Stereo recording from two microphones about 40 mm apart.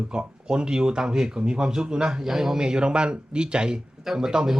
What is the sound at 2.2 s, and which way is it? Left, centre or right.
A man's voice, centre.